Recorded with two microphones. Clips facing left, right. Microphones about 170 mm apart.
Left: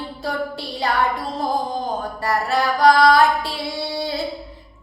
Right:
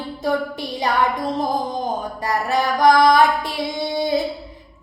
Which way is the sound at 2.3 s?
20° right (ahead or behind).